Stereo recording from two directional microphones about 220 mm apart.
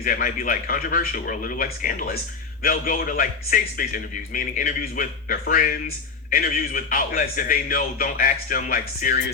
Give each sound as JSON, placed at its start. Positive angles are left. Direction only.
{"t": 0.0, "sound": "a man's voice", "side_deg": 40}